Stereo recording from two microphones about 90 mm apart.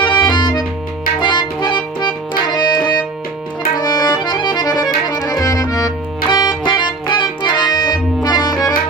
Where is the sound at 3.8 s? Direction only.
50° left (ahead or behind).